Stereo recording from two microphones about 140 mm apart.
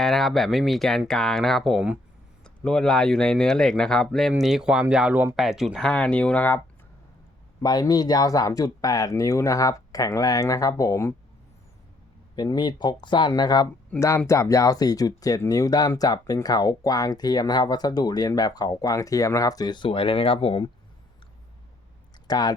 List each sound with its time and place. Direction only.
0.0 s speech: centre (ahead or behind)
7.6 s speech: 25° left (ahead or behind)
12.4 s speech: 30° left (ahead or behind)
13.9 s speech: 10° left (ahead or behind)
14.3 s speech: 20° left (ahead or behind); by 20.7 s 40° left (ahead or behind)
22.3 s speech: 30° left (ahead or behind)